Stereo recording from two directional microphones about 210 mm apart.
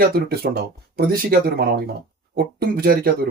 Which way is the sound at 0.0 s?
45° right (ahead or behind).